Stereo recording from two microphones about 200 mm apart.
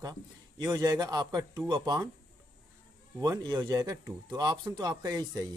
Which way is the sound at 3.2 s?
20° right (ahead or behind).